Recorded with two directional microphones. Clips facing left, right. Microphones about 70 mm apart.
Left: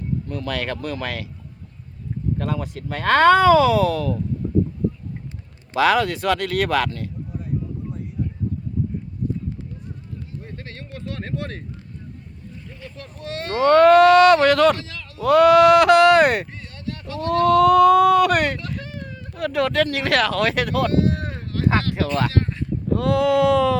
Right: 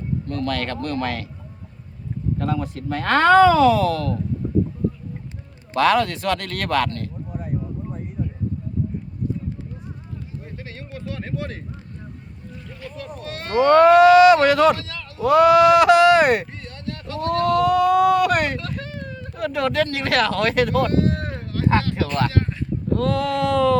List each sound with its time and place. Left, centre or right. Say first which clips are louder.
0.3 s speech: right 4 dB; centre
2.4 s speech: right 2 dB; centre
5.7 s speech: even; centre
7.3 s a sound: right 1 dB; right
10.4 s a sound: even; centre
13.2 s speech: right 2 dB; right
13.7 s speech: even; centre
20.9 s speech: even; right
21.3 s a sound: right 1 dB; centre
22.9 s speech: left 3 dB; centre